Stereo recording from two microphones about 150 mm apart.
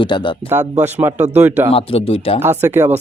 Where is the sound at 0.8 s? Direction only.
15° right (ahead or behind).